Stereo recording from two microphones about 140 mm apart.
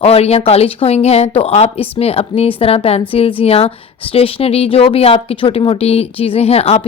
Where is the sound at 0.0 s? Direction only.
50° left (ahead or behind).